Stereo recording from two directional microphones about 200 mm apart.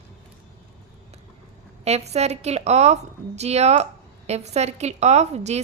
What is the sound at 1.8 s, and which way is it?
A woman's voice, 35° right (ahead or behind).